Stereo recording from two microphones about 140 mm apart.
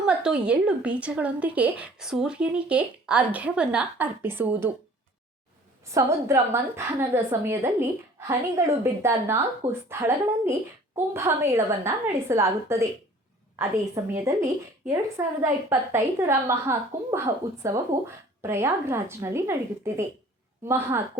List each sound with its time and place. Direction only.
0.0 s a woman's voice: 5° right (ahead or behind)
5.9 s a woman's voice: 20° right (ahead or behind)